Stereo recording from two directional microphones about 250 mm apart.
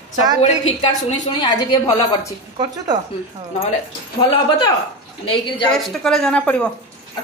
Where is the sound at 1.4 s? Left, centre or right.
Centre.